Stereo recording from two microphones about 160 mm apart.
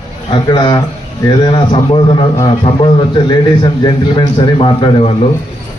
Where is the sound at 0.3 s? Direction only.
30° left (ahead or behind).